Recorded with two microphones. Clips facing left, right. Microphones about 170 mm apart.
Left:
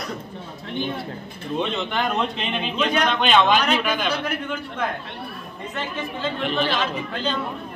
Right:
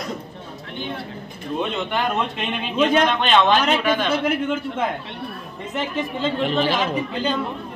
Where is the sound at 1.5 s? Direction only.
5° right (ahead or behind).